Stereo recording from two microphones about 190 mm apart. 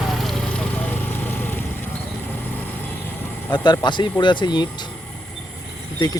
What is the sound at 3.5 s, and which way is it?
Speech, 20° left (ahead or behind).